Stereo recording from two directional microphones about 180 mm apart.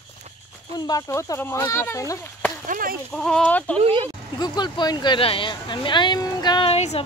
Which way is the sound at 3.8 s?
30° right (ahead or behind).